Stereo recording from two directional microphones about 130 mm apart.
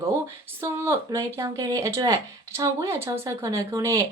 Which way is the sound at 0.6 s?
20° right (ahead or behind).